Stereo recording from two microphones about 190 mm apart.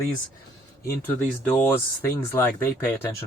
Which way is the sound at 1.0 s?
10° left (ahead or behind).